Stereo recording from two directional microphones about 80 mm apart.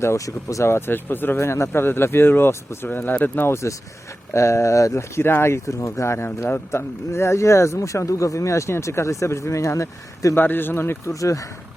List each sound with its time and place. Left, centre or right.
0.0 s speech: left
10.3 s speech: left
11.1 s speech: left